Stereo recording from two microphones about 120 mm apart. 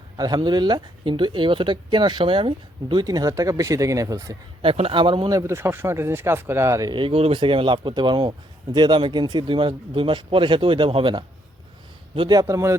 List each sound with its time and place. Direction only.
0.2 s speech: 35° right (ahead or behind)
4.6 s speech: 50° right (ahead or behind)
5.3 s speech: 25° right (ahead or behind)
6.9 s speech: 50° right (ahead or behind)
12.3 s speech: 25° right (ahead or behind)